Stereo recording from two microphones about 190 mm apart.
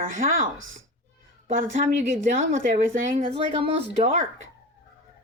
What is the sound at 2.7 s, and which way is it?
Speech, 35° right (ahead or behind).